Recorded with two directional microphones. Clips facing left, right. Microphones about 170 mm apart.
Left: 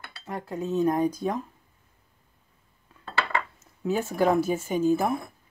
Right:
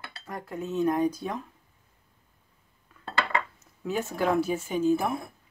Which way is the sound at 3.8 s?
40° left (ahead or behind).